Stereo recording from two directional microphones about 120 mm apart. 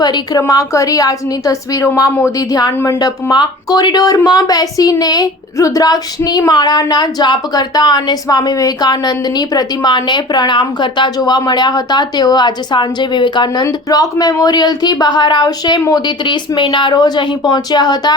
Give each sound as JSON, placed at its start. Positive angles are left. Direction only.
{"t": 0.0, "sound": "a woman's voice", "side_deg": 35}
{"t": 2.6, "sound": "a woman's voice", "side_deg": 35}